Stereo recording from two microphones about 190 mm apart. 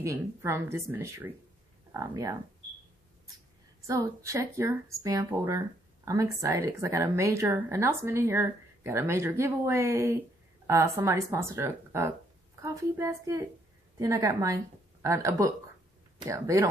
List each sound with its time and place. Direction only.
0.0 s a woman's voice: 15° right (ahead or behind)
3.8 s a woman's voice: 15° right (ahead or behind)